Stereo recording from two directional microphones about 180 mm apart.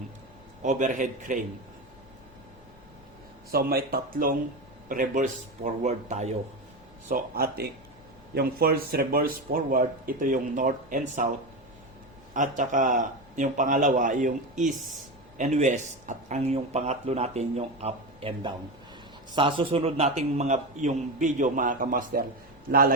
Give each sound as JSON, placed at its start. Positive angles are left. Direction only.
{"t": 0.6, "sound": "speech", "side_deg": -45}
{"t": 3.5, "sound": "speech", "side_deg": -55}
{"t": 7.1, "sound": "speech", "side_deg": -55}
{"t": 12.3, "sound": "speech", "side_deg": -45}
{"t": 15.4, "sound": "speech", "side_deg": -40}